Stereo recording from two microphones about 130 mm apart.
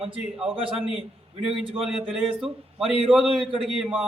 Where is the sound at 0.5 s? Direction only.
45° right (ahead or behind).